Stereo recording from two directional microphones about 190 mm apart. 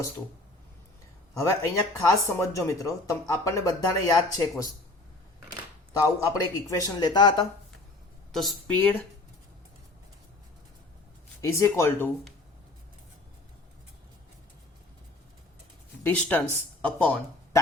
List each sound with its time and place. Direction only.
1.4 s speech: 15° left (ahead or behind)
6.1 s a man's voice: 15° left (ahead or behind)
8.3 s speech: centre (ahead or behind)
11.3 s speech: 15° left (ahead or behind)
16.0 s speech: 10° left (ahead or behind)